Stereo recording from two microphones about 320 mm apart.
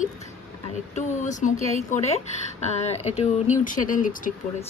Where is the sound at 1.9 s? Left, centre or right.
Left.